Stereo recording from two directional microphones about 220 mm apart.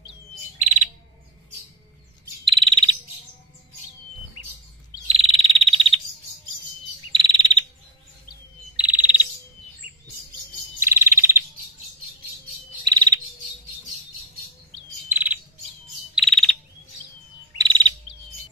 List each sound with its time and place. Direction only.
0.6 s bird: 35° right (ahead or behind)
2.4 s frog: 25° right (ahead or behind)
5.0 s frog: 25° right (ahead or behind)
7.1 s bird: 25° right (ahead or behind)
8.7 s bird: 5° right (ahead or behind)
10.8 s bird: 10° right (ahead or behind)
12.8 s frog: 20° right (ahead or behind)
15.0 s bird: 10° right (ahead or behind)
16.2 s frog: centre (ahead or behind)
17.6 s chirp: 20° right (ahead or behind)